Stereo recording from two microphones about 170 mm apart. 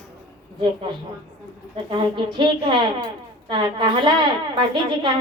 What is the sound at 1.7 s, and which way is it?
A man's voice, 25° right (ahead or behind).